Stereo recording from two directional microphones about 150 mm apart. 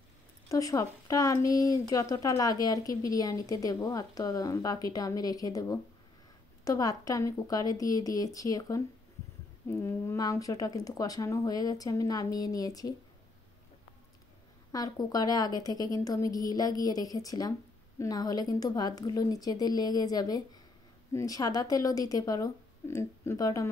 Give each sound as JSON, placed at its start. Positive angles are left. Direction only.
{"t": 0.5, "sound": "a woman's voice", "side_deg": 20}
{"t": 14.7, "sound": "a woman's voice", "side_deg": 25}